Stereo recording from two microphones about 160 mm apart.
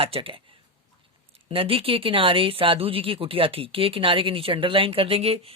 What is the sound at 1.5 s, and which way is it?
Speech, 35° right (ahead or behind).